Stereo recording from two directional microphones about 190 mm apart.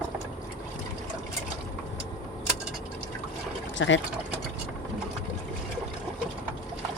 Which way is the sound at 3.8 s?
75° left (ahead or behind).